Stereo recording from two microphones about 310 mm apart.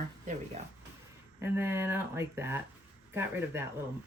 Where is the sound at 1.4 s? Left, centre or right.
Centre.